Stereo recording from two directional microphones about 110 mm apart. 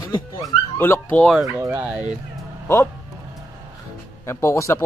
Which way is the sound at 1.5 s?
25° right (ahead or behind).